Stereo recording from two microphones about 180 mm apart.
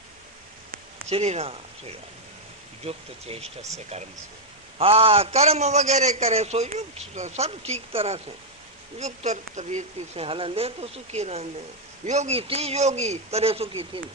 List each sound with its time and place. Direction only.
1.1 s a man's voice: 35° right (ahead or behind)